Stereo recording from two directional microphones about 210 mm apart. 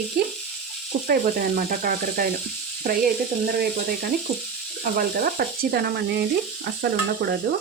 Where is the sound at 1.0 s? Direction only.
45° right (ahead or behind).